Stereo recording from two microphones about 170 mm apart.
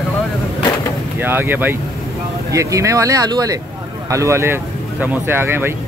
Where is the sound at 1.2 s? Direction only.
10° right (ahead or behind).